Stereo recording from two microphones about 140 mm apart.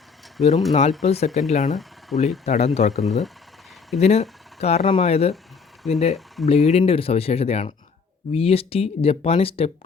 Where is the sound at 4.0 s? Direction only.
50° left (ahead or behind).